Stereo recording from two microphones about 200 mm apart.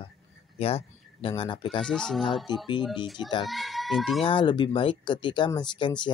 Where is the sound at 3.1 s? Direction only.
20° left (ahead or behind).